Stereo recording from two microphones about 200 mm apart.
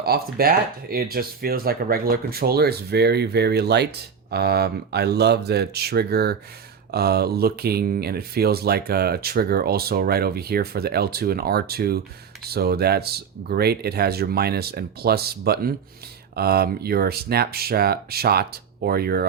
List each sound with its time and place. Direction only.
0.0 s speech: 50° right (ahead or behind)